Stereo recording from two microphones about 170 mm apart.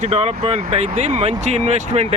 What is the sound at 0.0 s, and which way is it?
Speech, 35° right (ahead or behind).